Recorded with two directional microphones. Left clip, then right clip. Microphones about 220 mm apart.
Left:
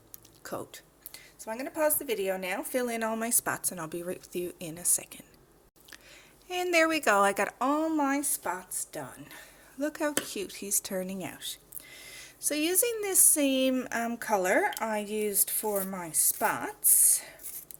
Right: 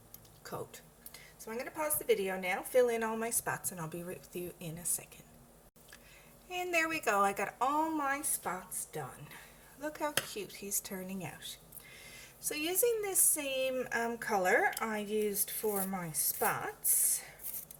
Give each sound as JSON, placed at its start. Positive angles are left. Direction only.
{"t": 0.4, "sound": "speech", "side_deg": 45}
{"t": 6.5, "sound": "a woman's voice", "side_deg": 40}
{"t": 9.8, "sound": "speech", "side_deg": 40}